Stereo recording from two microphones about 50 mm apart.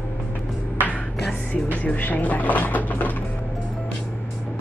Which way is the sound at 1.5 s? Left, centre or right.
Left.